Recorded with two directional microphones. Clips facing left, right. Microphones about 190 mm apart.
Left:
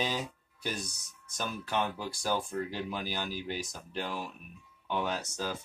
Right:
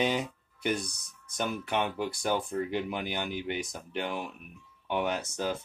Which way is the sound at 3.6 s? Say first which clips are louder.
Right 3 dB; 70° right (ahead or behind).